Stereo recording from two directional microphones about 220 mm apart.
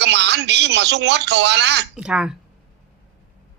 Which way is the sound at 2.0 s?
5° right (ahead or behind).